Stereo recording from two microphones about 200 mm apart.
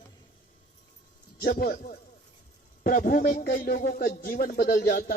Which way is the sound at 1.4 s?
45° left (ahead or behind).